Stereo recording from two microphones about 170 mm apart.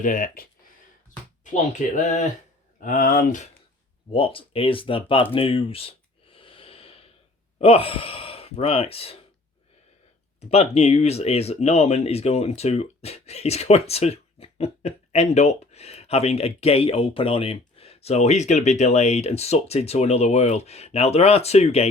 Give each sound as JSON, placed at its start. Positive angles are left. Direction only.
{"t": 0.0, "sound": "speech", "side_deg": 55}
{"t": 1.5, "sound": "speech", "side_deg": 50}
{"t": 2.8, "sound": "speech", "side_deg": 55}
{"t": 4.1, "sound": "speech", "side_deg": 30}
{"t": 10.5, "sound": "speech", "side_deg": 35}